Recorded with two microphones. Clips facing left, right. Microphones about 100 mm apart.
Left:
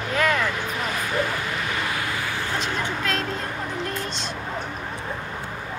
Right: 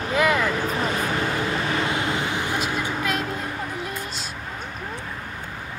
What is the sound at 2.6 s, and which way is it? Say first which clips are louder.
Vehicle: right 1 dB; 10° right (ahead or behind).